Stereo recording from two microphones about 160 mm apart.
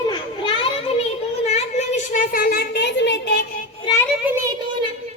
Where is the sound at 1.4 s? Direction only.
45° left (ahead or behind); by 3.4 s 90° left.